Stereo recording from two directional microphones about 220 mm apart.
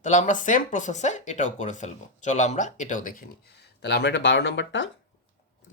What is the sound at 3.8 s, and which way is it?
Speech, 50° left (ahead or behind).